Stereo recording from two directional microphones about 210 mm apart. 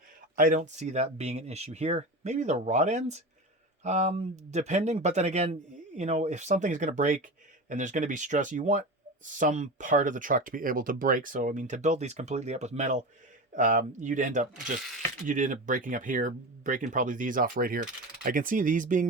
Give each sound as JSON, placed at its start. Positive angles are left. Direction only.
{"t": 0.3, "sound": "speech", "side_deg": -35}